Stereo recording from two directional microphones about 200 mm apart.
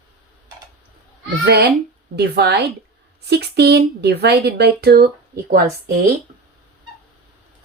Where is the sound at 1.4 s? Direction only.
55° right (ahead or behind).